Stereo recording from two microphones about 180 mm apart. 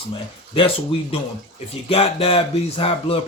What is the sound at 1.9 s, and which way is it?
Speech, 30° left (ahead or behind).